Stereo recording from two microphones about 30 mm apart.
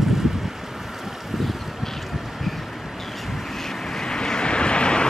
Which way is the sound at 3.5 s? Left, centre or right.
Centre.